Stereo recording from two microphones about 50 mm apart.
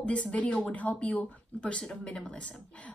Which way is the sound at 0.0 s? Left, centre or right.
Left.